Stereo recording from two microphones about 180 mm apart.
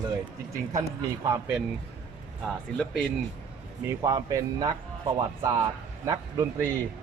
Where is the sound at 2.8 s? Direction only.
5° left (ahead or behind).